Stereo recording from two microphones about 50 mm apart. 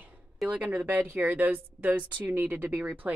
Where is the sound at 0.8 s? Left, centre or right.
Right.